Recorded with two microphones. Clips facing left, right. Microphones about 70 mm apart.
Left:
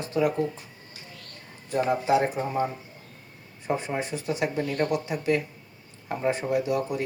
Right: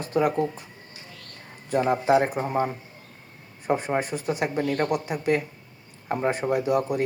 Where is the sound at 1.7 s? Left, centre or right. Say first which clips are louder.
Right 2 dB; right.